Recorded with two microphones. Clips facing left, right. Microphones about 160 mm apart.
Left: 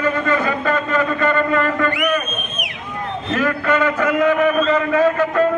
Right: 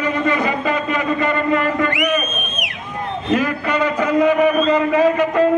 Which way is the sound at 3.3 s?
15° right (ahead or behind).